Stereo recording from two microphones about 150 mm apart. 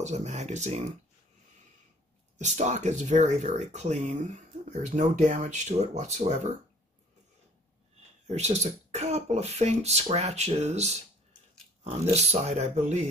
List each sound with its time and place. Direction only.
0.0 s speech: 50° right (ahead or behind)
2.3 s speech: 50° right (ahead or behind)
8.3 s speech: 45° right (ahead or behind)